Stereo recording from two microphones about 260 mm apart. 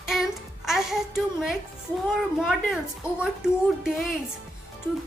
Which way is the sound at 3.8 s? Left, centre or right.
Centre.